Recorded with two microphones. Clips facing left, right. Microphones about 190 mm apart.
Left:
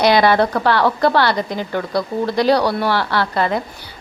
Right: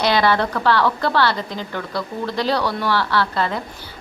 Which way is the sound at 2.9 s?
15° left (ahead or behind).